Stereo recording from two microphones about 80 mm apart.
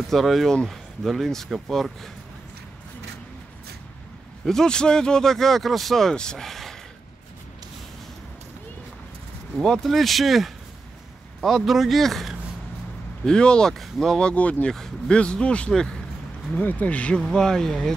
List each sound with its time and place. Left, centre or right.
0.1 s speech: centre
4.5 s speech: centre
9.6 s speech: centre
16.5 s speech: centre